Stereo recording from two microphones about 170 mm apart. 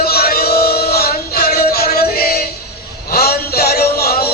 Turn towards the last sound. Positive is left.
turn(degrees=65)  # may be behind; listen again after turning